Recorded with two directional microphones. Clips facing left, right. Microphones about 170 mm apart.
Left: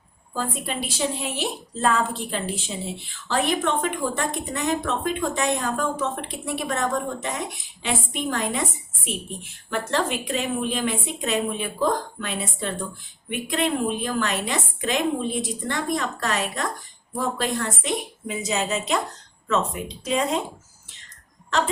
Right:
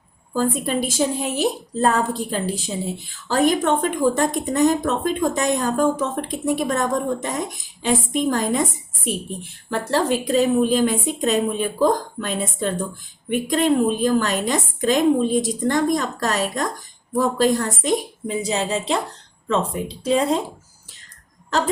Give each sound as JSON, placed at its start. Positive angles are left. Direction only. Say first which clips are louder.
{"t": 0.3, "sound": "a woman's voice", "louder": "right 7 dB", "side_deg": -40}